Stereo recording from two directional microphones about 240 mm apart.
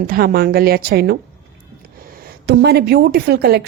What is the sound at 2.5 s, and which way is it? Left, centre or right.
A woman's voice, right.